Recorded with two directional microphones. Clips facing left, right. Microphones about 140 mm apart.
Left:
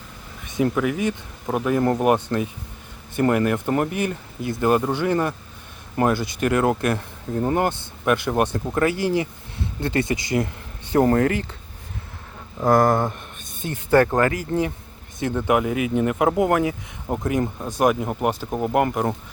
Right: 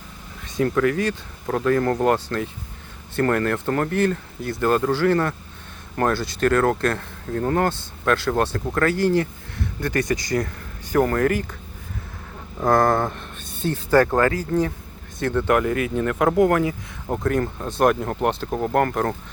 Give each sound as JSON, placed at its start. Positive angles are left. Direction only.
{"t": 0.5, "sound": "speech", "side_deg": 15}
{"t": 12.6, "sound": "speech", "side_deg": 20}